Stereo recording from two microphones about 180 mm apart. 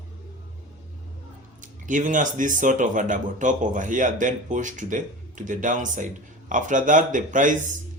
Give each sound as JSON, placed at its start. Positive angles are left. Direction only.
{"t": 1.6, "sound": "speech", "side_deg": -45}